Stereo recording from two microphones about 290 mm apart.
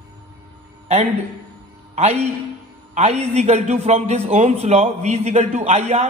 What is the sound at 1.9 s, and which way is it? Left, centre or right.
A man's voice, right.